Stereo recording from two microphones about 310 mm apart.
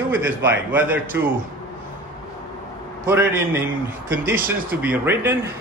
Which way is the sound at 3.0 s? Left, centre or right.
Centre.